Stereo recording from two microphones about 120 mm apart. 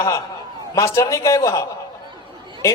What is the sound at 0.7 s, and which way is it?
Speech, 25° left (ahead or behind).